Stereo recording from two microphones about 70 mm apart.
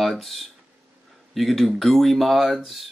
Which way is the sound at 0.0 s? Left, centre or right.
Centre.